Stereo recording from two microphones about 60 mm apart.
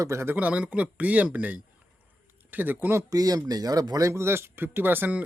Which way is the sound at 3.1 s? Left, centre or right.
Right.